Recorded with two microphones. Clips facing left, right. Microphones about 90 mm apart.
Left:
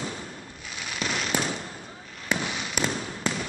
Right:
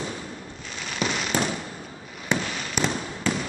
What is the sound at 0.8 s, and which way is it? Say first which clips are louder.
Fireworks: right 3 dB; 5° left (ahead or behind).